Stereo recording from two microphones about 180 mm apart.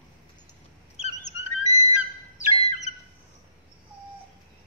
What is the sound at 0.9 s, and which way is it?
Bird, 35° left (ahead or behind).